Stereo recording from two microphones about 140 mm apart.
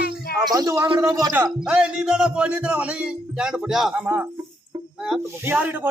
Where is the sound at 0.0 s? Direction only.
90° left.